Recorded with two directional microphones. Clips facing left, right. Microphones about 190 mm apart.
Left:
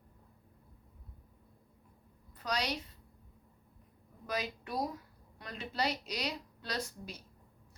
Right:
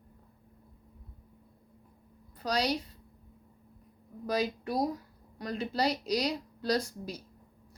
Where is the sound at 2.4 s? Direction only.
35° right (ahead or behind).